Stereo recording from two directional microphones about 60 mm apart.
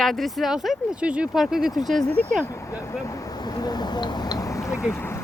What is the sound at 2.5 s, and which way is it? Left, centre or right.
Speech, left.